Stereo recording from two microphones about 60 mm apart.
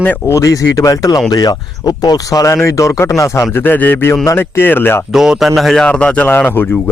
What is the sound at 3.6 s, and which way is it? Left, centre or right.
Speech, left.